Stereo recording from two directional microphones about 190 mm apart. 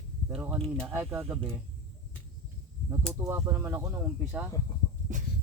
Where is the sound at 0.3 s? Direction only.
5° right (ahead or behind).